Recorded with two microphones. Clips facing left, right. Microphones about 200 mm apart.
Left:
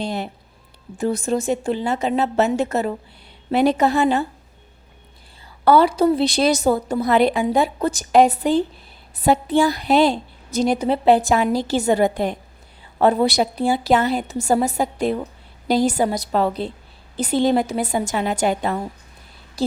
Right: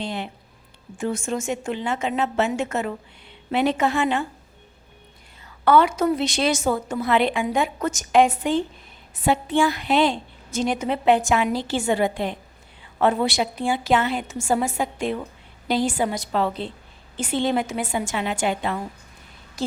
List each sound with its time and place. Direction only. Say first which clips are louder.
0.0 s a woman's voice: left 4 dB; 40° left (ahead or behind)
5.6 s a woman's voice: left 3 dB; 35° left (ahead or behind)